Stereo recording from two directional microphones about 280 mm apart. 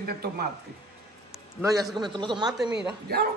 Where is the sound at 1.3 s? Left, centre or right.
Centre.